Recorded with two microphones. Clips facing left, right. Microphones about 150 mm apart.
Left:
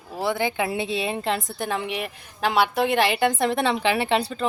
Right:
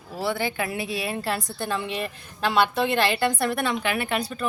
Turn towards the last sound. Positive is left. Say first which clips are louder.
# left 4 dB
turn(degrees=25)  # may be behind; listen again after turning